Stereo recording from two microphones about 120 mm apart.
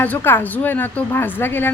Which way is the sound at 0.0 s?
15° left (ahead or behind).